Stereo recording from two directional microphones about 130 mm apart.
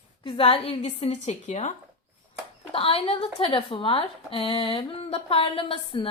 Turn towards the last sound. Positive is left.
turn(degrees=45)  # may be behind; listen again after turning